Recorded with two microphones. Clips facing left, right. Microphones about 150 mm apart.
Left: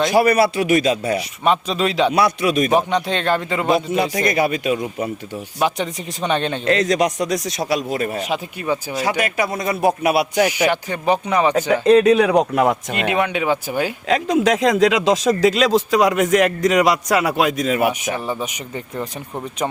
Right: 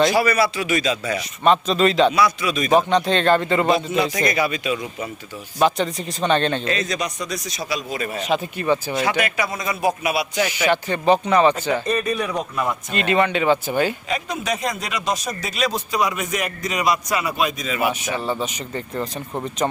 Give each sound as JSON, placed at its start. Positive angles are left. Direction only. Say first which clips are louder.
{"t": 0.1, "sound": "a man's voice", "louder": "left 4 dB", "side_deg": 55}
{"t": 1.5, "sound": "speech", "louder": "right 2 dB", "side_deg": 10}
{"t": 2.1, "sound": "a man's voice", "louder": "left 3 dB", "side_deg": 55}
{"t": 2.7, "sound": "speech", "louder": "right 1 dB", "side_deg": 10}
{"t": 3.8, "sound": "a man's voice", "louder": "left 2 dB", "side_deg": 50}
{"t": 5.5, "sound": "speech", "louder": "right 2 dB", "side_deg": 10}
{"t": 6.7, "sound": "a man's voice", "louder": "left 7 dB", "side_deg": 75}
{"t": 8.2, "sound": "speech", "louder": "right 2 dB", "side_deg": 10}
{"t": 9.0, "sound": "a man's voice", "louder": "left 1 dB", "side_deg": 40}
{"t": 10.4, "sound": "speech", "louder": "left 3 dB", "side_deg": 15}
{"t": 11.7, "sound": "a man's voice", "louder": "left 9 dB", "side_deg": 80}
{"t": 13.1, "sound": "speech", "louder": "right 1 dB", "side_deg": 10}
{"t": 14.1, "sound": "speech", "louder": "left 8 dB", "side_deg": 90}
{"t": 18.3, "sound": "speech", "louder": "even", "side_deg": 15}